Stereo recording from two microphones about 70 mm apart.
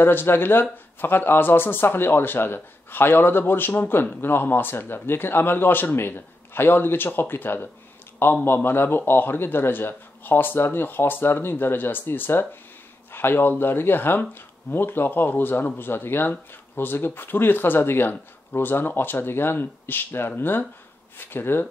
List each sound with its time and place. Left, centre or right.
0.0 s speech: left